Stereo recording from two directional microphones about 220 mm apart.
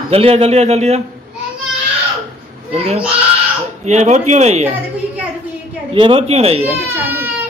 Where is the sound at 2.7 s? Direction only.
30° right (ahead or behind).